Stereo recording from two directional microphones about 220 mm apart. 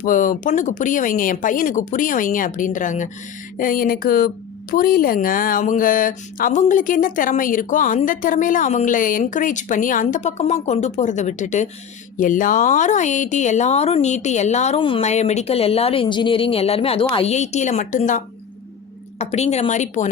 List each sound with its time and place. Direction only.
0.0 s speech: 35° left (ahead or behind)
19.2 s speech: 30° left (ahead or behind)